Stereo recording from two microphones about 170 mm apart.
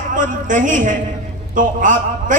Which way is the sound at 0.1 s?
50° right (ahead or behind).